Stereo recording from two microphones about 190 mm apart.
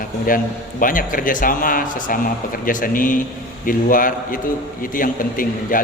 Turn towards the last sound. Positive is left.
turn(degrees=45)  # may be behind; listen again after turning